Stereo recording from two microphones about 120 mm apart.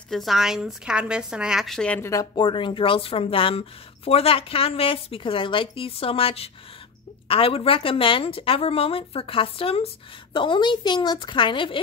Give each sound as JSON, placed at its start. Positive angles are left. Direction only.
{"t": 0.1, "sound": "a woman's voice", "side_deg": 0}
{"t": 2.0, "sound": "speech", "side_deg": 25}
{"t": 2.3, "sound": "a woman's voice", "side_deg": 45}